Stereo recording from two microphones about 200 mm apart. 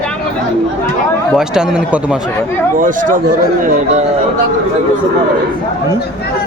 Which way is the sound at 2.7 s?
45° right (ahead or behind).